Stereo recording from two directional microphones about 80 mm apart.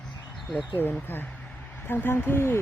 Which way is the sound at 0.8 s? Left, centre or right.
Left.